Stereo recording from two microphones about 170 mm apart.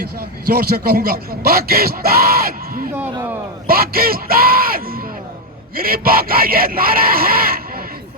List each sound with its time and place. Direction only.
0.0 s a man's voice: 65° right (ahead or behind)
2.9 s a sound: 10° right (ahead or behind)
3.7 s speech: 60° right (ahead or behind)